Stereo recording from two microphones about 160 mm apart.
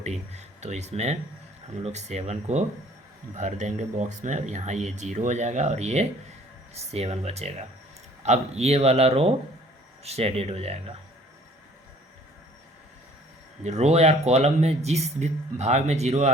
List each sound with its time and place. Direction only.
0.0 s speech: 45° right (ahead or behind)
13.7 s speech: 45° right (ahead or behind)